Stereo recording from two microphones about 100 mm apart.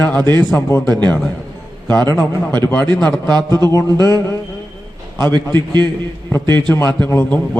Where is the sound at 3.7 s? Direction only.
30° left (ahead or behind).